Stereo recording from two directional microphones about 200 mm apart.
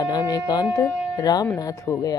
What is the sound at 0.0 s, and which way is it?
Speech, 20° left (ahead or behind).